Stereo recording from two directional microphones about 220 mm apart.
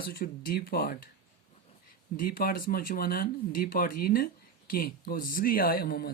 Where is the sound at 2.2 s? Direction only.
40° left (ahead or behind).